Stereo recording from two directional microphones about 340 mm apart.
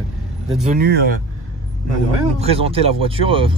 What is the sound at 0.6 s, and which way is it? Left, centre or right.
Speech, right.